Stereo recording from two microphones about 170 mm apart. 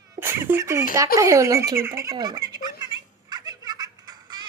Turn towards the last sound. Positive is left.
turn(degrees=-25)  # may be behind; listen again after turning